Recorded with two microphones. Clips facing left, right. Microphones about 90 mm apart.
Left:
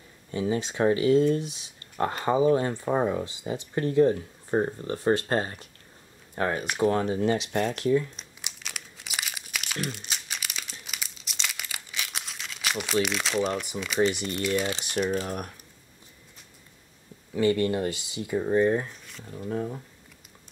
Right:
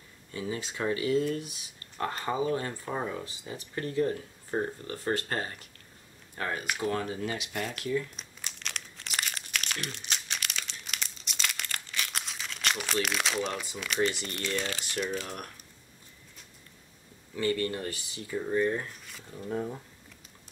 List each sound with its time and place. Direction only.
0.3 s speech: 25° left (ahead or behind)
8.5 s crumpling: 10° left (ahead or behind)
14.4 s speech: 10° left (ahead or behind)
15.0 s speech: 40° left (ahead or behind)
17.4 s speech: 20° left (ahead or behind)
19.5 s speech: centre (ahead or behind)